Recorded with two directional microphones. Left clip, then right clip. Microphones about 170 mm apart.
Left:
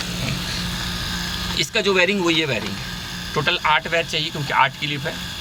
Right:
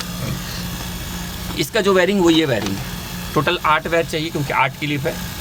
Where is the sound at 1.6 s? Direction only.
60° right (ahead or behind).